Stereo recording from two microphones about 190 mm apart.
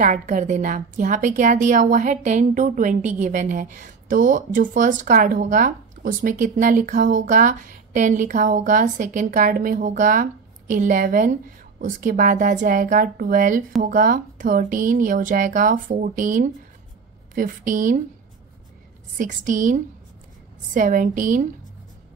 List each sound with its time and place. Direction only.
0.0 s a woman's voice: 40° right (ahead or behind)
19.1 s a woman's voice: 40° right (ahead or behind)